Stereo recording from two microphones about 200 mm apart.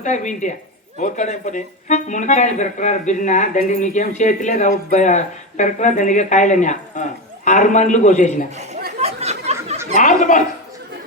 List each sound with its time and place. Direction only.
0.0 s speech: 40° left (ahead or behind)
8.4 s speech: 35° right (ahead or behind)
9.0 s a sound: 30° right (ahead or behind)
10.0 s chuckle: 40° left (ahead or behind)